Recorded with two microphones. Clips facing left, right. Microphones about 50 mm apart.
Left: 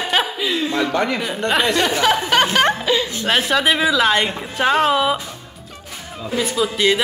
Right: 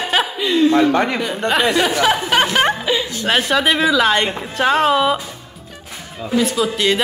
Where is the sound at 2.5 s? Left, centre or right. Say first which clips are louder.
Even; centre.